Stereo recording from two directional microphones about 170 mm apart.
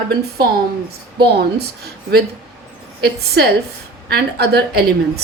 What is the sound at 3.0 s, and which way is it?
A woman's voice, 75° right (ahead or behind).